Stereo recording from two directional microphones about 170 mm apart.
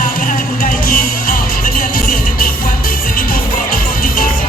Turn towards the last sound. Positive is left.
turn(degrees=55)  # may be behind; listen again after turning